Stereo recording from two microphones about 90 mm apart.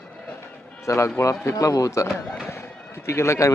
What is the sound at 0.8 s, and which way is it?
Speech, 35° left (ahead or behind).